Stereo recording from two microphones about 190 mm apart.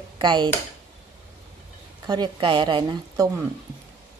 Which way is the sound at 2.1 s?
25° right (ahead or behind).